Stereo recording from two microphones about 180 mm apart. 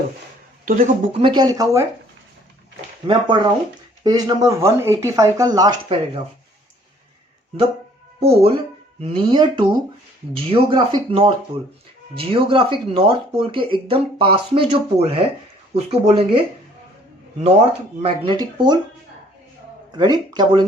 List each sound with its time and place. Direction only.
0.6 s speech: 45° right (ahead or behind)
1.2 s speech: 25° right (ahead or behind)
3.1 s speech: 25° right (ahead or behind)
8.2 s speech: 35° right (ahead or behind)
18.0 s speech: 30° right (ahead or behind)
19.9 s speech: 25° right (ahead or behind)